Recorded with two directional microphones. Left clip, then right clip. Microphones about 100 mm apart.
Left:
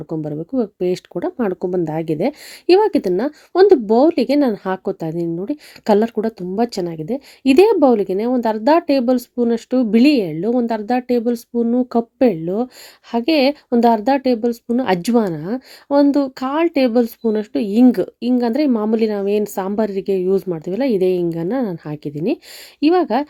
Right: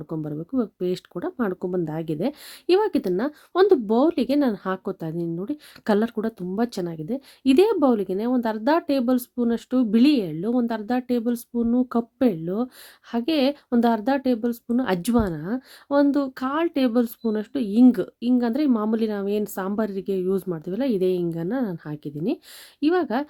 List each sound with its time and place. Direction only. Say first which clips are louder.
0.1 s speech: left 6 dB; 20° left (ahead or behind)